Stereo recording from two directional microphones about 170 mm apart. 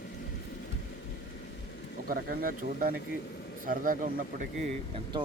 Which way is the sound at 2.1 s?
60° right (ahead or behind).